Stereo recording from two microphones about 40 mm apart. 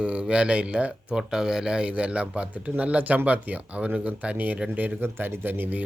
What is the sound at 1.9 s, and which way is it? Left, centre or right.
Speech, right.